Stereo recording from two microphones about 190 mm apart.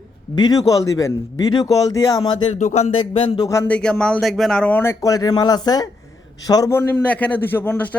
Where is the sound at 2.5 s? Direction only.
35° left (ahead or behind).